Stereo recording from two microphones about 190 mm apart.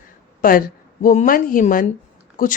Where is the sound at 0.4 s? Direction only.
45° left (ahead or behind).